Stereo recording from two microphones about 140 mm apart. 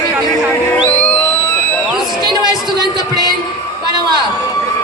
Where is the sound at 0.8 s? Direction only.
15° left (ahead or behind).